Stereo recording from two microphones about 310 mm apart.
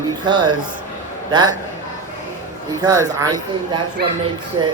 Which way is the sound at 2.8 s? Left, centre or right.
Centre.